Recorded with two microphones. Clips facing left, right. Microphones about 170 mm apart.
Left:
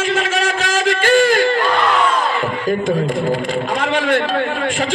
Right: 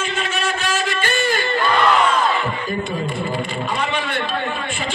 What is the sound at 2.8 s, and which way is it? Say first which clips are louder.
A man's voice: left 7 dB; 90° left.